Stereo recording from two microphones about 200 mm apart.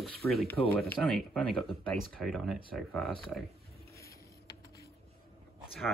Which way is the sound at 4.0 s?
15° left (ahead or behind).